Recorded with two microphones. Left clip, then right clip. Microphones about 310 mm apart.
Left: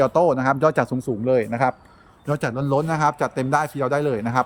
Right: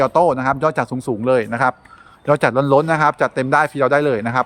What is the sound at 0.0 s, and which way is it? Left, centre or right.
A man's voice, centre.